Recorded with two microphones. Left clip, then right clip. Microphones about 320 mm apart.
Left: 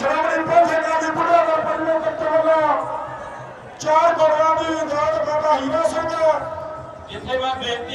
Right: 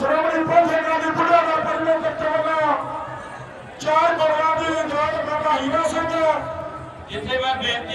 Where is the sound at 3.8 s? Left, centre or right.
Left.